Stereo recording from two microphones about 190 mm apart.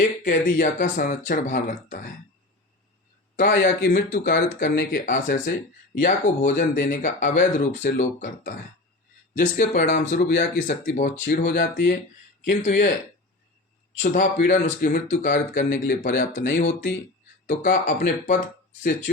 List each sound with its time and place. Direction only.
0.3 s speech: 45° left (ahead or behind)
3.3 s speech: 50° left (ahead or behind)
6.0 s speech: 40° left (ahead or behind)
12.5 s speech: 55° left (ahead or behind)
14.0 s speech: 45° left (ahead or behind)